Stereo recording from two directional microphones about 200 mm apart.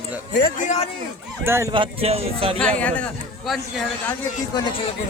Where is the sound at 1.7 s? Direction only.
25° right (ahead or behind).